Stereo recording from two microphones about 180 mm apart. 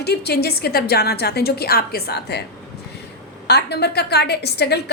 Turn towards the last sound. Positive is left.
turn(degrees=65)  # may be behind; listen again after turning